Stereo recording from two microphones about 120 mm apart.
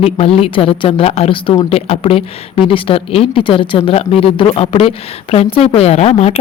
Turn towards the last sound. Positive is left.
turn(degrees=60)  # may be behind; listen again after turning